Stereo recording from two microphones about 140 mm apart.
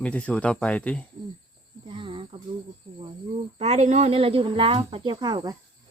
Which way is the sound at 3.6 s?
50° right (ahead or behind).